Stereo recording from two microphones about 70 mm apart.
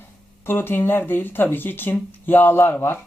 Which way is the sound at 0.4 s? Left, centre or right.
Left.